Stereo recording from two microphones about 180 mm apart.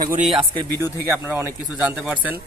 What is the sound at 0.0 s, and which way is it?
Speech, 50° right (ahead or behind).